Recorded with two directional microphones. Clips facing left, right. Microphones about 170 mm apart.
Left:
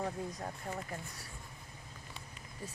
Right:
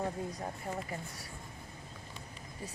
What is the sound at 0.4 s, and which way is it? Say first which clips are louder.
Speech: right 2 dB; 5° right (ahead or behind).